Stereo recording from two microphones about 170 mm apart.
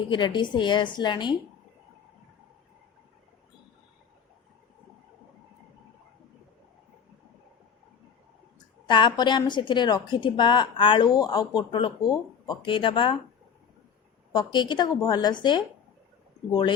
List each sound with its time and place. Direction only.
0.1 s a woman's voice: 25° left (ahead or behind)
8.9 s a woman's voice: 30° left (ahead or behind)
14.3 s a woman's voice: 25° left (ahead or behind)